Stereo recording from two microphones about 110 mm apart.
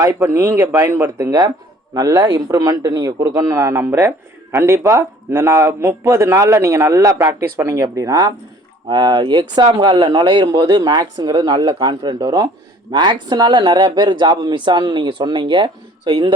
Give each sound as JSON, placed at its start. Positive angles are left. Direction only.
{"t": 0.0, "sound": "a man's voice", "side_deg": -30}
{"t": 1.9, "sound": "a man's voice", "side_deg": -30}
{"t": 8.9, "sound": "a man's voice", "side_deg": -45}